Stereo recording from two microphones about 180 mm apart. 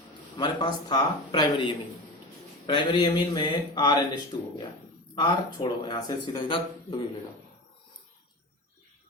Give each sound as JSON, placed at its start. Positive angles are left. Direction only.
{"t": 0.3, "sound": "speech", "side_deg": 25}